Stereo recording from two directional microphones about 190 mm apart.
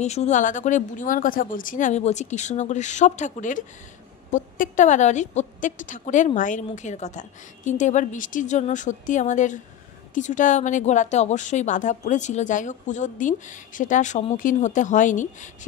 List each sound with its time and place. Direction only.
0.0 s a woman's voice: 35° left (ahead or behind)